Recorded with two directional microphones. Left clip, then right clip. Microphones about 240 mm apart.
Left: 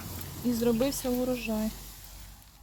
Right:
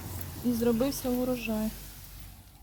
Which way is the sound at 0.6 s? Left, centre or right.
Centre.